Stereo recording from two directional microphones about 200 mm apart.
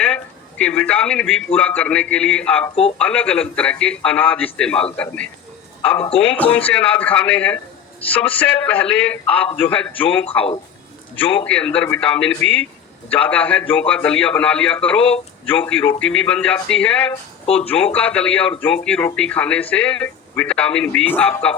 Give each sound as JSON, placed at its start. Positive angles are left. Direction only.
{"t": 0.6, "sound": "a man's voice", "side_deg": 5}
{"t": 17.4, "sound": "speech", "side_deg": 30}
{"t": 17.7, "sound": "a man's voice", "side_deg": 5}